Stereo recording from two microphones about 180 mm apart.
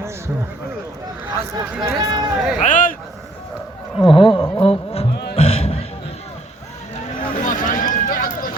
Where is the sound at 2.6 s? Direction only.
45° left (ahead or behind).